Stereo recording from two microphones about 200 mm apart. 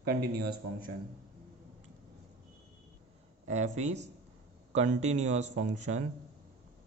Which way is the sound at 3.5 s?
35° right (ahead or behind).